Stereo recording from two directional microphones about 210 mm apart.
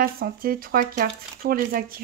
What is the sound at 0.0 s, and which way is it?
Speech, 45° right (ahead or behind).